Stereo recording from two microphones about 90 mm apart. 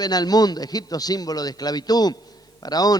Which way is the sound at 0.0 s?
50° left (ahead or behind).